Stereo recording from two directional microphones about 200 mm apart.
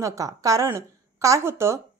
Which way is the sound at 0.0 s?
15° right (ahead or behind).